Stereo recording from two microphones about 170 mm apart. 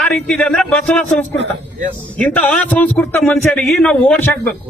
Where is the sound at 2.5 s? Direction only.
10° left (ahead or behind).